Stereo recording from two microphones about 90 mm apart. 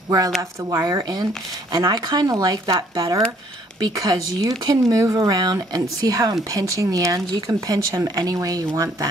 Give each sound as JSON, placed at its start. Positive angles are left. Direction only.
{"t": 0.4, "sound": "speech", "side_deg": -35}